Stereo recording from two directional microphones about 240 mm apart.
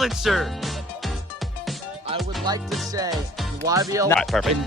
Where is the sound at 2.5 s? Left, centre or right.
Centre.